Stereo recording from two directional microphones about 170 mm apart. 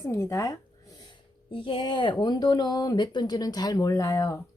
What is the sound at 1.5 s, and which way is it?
Speech, 30° left (ahead or behind).